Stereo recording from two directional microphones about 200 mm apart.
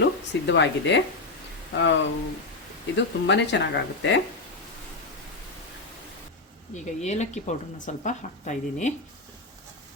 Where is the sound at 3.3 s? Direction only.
65° left (ahead or behind).